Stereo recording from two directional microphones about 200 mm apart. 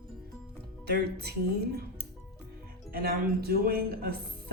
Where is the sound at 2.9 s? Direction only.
50° right (ahead or behind).